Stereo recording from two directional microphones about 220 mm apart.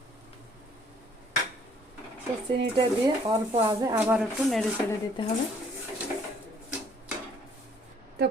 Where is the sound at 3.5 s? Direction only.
15° right (ahead or behind); by 4.6 s centre (ahead or behind).